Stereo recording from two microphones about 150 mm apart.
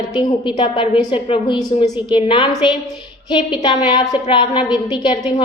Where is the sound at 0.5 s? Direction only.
40° left (ahead or behind).